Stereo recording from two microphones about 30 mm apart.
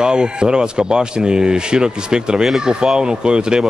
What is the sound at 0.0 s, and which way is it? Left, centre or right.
Speech, right.